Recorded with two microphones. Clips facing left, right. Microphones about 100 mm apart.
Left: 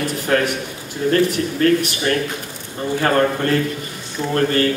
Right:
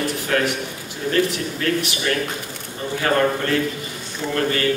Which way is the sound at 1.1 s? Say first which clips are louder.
Left 3 dB; 45° left (ahead or behind).